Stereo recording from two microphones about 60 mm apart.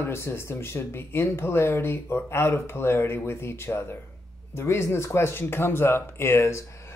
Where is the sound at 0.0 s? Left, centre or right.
Left.